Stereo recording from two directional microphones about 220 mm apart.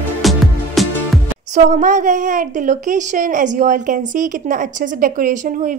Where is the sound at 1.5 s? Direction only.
35° right (ahead or behind).